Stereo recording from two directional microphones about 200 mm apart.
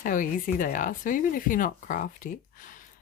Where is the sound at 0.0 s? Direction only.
40° left (ahead or behind).